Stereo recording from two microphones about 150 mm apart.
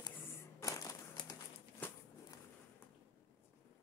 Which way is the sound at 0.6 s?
25° left (ahead or behind).